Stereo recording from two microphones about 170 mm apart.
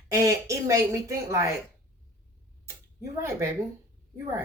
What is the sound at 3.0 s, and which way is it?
Speech, 15° right (ahead or behind).